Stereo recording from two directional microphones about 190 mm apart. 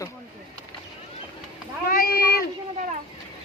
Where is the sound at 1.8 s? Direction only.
50° left (ahead or behind).